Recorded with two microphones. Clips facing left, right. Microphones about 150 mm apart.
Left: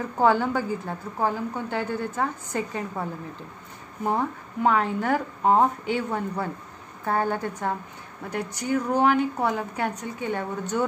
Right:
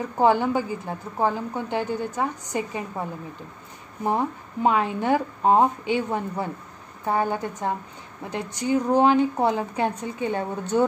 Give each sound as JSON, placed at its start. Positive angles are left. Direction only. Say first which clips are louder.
{"t": 0.2, "sound": "a woman's voice", "louder": "right 1 dB", "side_deg": -15}